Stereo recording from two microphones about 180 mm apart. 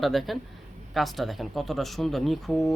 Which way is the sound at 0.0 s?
Centre (ahead or behind).